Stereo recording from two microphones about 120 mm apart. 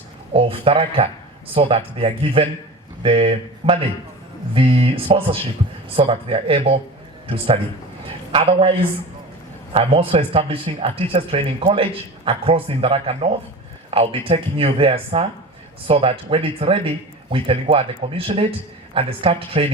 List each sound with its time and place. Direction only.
0.3 s speech: 50° right (ahead or behind)
9.7 s speech: 50° right (ahead or behind)